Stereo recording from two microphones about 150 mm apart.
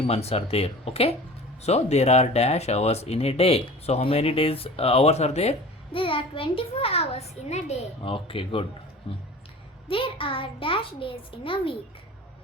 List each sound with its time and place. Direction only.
0.1 s a child's voice: 45° left (ahead or behind)
9.9 s a child's voice: 35° left (ahead or behind)